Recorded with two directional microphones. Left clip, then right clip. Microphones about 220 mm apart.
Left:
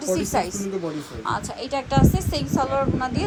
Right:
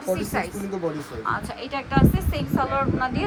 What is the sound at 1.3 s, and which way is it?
A woman's voice, 15° left (ahead or behind).